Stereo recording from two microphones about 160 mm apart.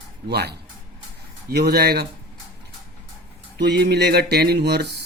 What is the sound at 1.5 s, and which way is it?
Speech, 75° right (ahead or behind).